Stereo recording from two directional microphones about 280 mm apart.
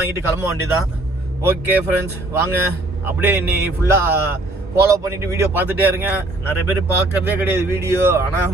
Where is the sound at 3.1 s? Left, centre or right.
Centre.